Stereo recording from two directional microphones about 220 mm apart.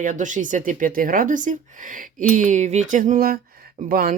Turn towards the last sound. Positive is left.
turn(degrees=-40)  # may be behind; listen again after turning